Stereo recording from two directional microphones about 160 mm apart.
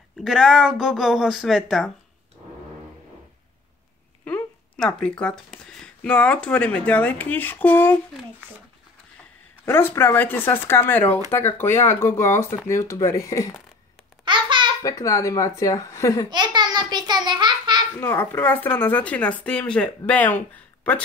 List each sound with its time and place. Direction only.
0.2 s speech: centre (ahead or behind)
4.2 s speech: 5° left (ahead or behind)
9.7 s speech: 15° left (ahead or behind)
14.2 s babbling: 30° right (ahead or behind)
14.8 s speech: 20° left (ahead or behind)
16.3 s a sound: 25° right (ahead or behind)
18.0 s speech: 15° left (ahead or behind)